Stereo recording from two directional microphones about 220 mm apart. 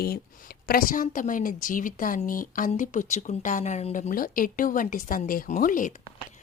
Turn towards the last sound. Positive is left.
turn(degrees=40)  # may be behind; listen again after turning